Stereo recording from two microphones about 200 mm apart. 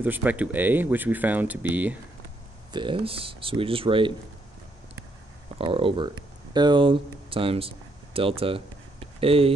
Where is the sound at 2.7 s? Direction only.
25° right (ahead or behind).